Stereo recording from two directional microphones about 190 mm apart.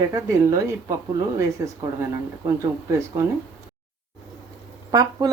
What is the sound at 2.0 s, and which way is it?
Speech, 15° right (ahead or behind).